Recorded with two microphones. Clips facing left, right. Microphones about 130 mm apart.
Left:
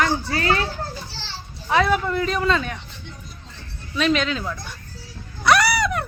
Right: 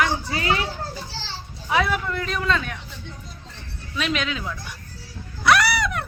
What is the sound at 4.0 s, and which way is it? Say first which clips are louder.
Speech: left 5 dB; 5° right (ahead or behind).